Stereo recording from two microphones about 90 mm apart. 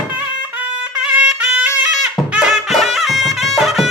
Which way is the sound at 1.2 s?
10° right (ahead or behind).